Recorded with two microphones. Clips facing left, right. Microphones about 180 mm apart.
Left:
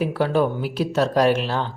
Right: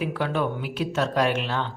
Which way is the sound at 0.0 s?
40° left (ahead or behind).